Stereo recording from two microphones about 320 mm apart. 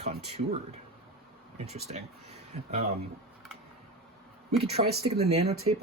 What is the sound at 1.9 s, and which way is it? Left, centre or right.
Speech, right.